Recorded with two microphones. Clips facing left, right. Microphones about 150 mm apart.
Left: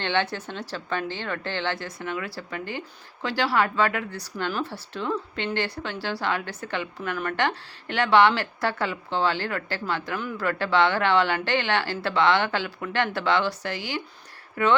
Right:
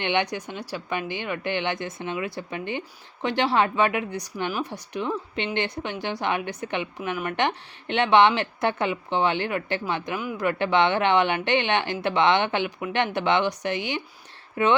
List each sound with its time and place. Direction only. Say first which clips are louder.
0.0 s speech: right 1 dB; 15° right (ahead or behind)